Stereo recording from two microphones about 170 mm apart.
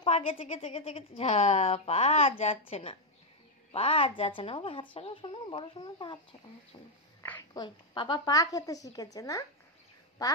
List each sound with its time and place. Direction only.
0.0 s a woman's voice: 35° left (ahead or behind)
7.5 s a woman's voice: 25° left (ahead or behind)